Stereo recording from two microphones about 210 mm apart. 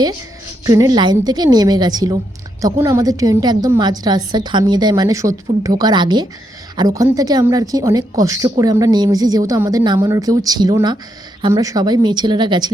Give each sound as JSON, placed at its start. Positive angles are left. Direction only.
{"t": 0.6, "sound": "a woman's voice", "side_deg": -15}